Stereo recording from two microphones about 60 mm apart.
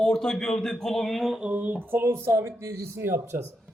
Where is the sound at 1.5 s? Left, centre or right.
Right.